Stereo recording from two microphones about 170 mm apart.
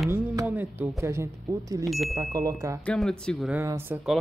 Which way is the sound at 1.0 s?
15° right (ahead or behind).